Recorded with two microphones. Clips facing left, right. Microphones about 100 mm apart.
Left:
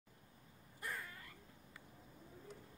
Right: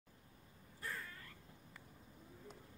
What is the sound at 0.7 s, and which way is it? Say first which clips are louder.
Cat: left 1 dB; 15° left (ahead or behind).